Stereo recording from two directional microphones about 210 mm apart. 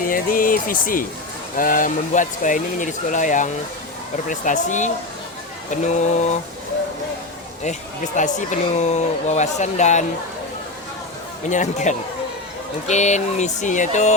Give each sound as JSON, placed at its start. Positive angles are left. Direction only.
{"t": 0.0, "sound": "speech", "side_deg": 40}
{"t": 7.6, "sound": "speech", "side_deg": 35}
{"t": 11.4, "sound": "speech", "side_deg": 35}